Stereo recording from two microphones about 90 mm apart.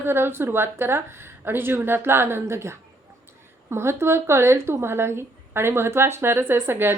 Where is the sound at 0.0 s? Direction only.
25° right (ahead or behind).